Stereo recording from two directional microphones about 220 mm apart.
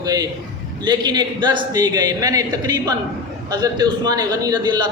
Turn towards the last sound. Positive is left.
turn(degrees=-20)  # may be behind; listen again after turning